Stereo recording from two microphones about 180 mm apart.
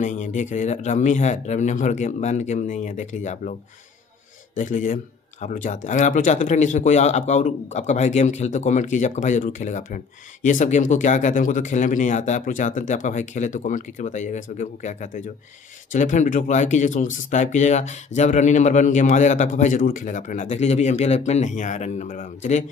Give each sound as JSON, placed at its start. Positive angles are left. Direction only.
{"t": 0.0, "sound": "speech", "side_deg": 45}
{"t": 4.6, "sound": "speech", "side_deg": 45}